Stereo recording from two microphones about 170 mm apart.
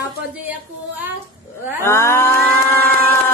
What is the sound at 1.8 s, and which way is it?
Cattle, 15° left (ahead or behind).